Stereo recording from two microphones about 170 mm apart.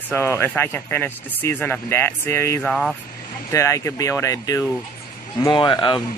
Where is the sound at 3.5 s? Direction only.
15° left (ahead or behind).